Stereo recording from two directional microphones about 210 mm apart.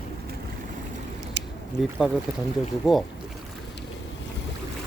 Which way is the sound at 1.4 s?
55° right (ahead or behind).